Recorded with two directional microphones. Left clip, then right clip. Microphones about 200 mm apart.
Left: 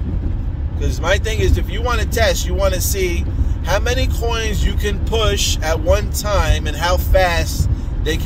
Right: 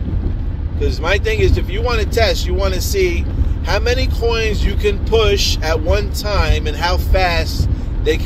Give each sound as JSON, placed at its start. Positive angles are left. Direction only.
{"t": 0.8, "sound": "speech", "side_deg": 20}